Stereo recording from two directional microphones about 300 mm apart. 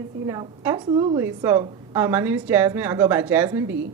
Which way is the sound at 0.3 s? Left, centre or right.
Centre.